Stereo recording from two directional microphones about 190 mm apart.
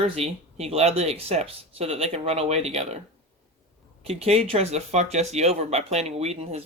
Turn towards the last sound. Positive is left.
turn(degrees=-35)  # may be behind; listen again after turning